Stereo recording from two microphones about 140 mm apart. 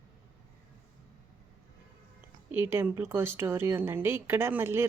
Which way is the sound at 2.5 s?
15° right (ahead or behind).